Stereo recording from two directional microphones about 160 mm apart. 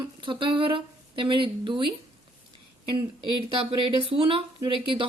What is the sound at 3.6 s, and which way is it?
A woman's voice, 35° right (ahead or behind).